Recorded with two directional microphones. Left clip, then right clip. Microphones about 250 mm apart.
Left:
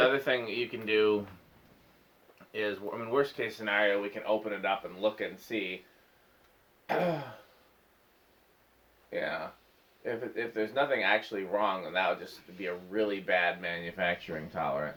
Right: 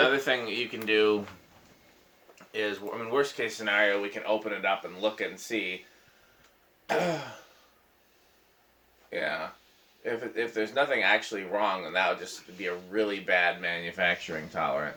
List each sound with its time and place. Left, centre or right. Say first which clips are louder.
0.0 s speech: right 2 dB; left
2.5 s speech: right 2 dB; centre
6.8 s speech: right 2 dB; centre
9.0 s speech: right 3 dB; centre